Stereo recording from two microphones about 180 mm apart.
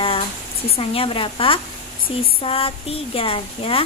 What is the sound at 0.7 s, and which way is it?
Speech, 30° left (ahead or behind).